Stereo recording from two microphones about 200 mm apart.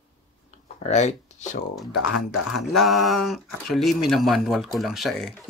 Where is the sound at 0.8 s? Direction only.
35° left (ahead or behind).